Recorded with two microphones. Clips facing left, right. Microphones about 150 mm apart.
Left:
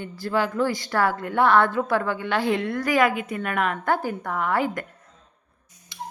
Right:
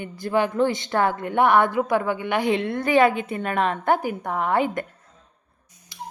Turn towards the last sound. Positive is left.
turn(degrees=-25)  # may be behind; listen again after turning